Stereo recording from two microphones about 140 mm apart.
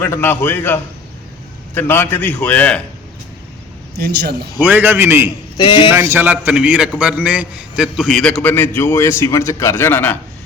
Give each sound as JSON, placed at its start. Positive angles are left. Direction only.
{"t": 0.0, "sound": "a man's voice", "side_deg": 20}
{"t": 4.6, "sound": "a man's voice", "side_deg": -15}
{"t": 5.5, "sound": "a man's voice", "side_deg": 35}
{"t": 5.9, "sound": "a man's voice", "side_deg": -20}
{"t": 8.4, "sound": "a man's voice", "side_deg": 15}